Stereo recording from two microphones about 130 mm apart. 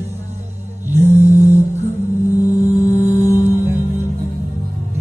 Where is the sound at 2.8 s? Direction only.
55° left (ahead or behind).